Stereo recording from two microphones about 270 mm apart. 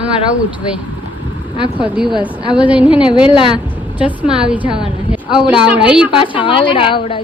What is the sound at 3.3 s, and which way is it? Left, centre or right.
Speech, centre.